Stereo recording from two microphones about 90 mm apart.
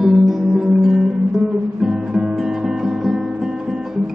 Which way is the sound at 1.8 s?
10° right (ahead or behind).